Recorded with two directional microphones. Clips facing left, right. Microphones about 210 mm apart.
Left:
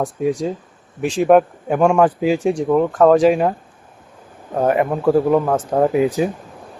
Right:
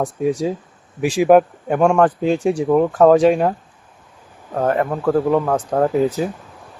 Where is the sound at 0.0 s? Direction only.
Centre (ahead or behind).